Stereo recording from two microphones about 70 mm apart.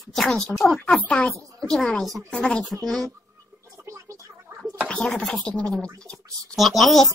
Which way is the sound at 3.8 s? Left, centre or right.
Right.